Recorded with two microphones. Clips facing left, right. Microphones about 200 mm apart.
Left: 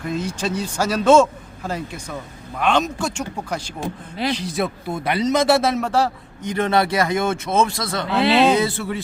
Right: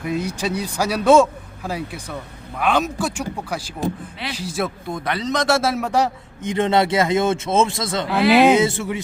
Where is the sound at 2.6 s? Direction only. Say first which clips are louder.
Even; 10° right (ahead or behind).